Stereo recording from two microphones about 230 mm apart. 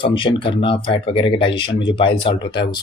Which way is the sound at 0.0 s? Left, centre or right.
Left.